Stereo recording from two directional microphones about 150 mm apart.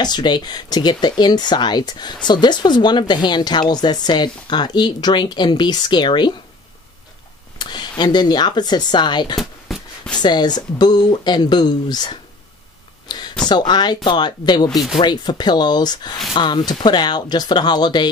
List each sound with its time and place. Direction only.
0.0 s speech: 30° left (ahead or behind)
7.5 s a sound: 30° left (ahead or behind)
8.0 s speech: 30° left (ahead or behind)
9.4 s a sound: centre (ahead or behind)
10.1 s speech: 30° left (ahead or behind)
13.5 s speech: 30° left (ahead or behind)
14.7 s speech: centre (ahead or behind)
15.0 s speech: 30° left (ahead or behind)